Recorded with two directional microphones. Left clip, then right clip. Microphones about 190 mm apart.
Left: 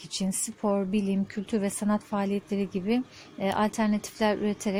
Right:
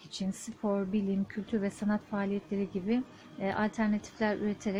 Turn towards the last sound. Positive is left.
turn(degrees=30)  # may be behind; listen again after turning